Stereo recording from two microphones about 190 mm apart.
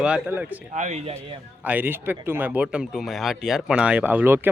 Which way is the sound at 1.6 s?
10° right (ahead or behind).